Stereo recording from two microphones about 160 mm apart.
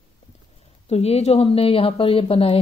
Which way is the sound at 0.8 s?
40° left (ahead or behind).